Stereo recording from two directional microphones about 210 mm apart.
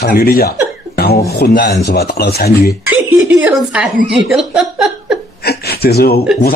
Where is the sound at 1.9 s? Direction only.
50° left (ahead or behind).